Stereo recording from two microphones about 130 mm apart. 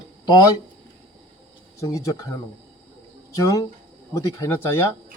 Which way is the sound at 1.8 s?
25° left (ahead or behind).